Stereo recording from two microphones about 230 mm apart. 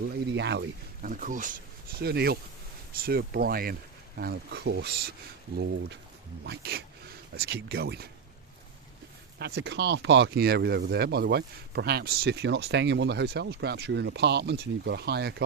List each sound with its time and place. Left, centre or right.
0.3 s speech: right
1.1 s speech: right
6.4 s speech: right
9.4 s speech: right